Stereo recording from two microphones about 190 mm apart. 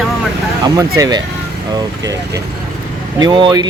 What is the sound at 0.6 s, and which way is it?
Speech, 20° right (ahead or behind).